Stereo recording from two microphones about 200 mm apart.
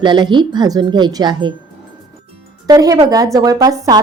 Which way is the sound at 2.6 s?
20° right (ahead or behind).